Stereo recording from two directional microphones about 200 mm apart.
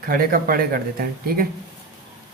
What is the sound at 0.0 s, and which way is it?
Speech, 45° right (ahead or behind).